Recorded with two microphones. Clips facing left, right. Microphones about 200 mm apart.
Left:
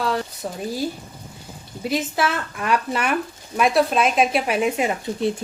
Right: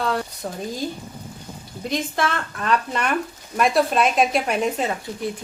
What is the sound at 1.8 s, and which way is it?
A woman's voice, 5° left (ahead or behind).